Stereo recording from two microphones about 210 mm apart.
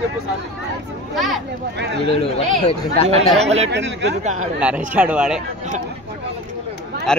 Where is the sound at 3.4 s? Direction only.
30° right (ahead or behind).